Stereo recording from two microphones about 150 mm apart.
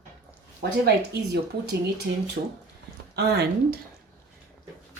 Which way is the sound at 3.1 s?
90° right.